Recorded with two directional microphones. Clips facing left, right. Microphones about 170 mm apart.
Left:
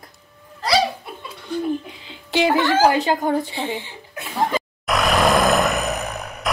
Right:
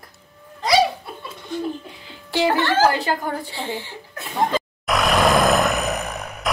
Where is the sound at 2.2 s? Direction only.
20° left (ahead or behind).